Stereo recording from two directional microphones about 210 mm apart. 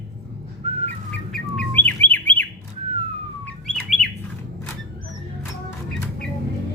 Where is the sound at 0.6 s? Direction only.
25° right (ahead or behind).